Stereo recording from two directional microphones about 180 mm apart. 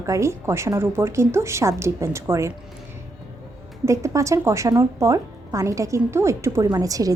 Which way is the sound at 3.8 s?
15° right (ahead or behind).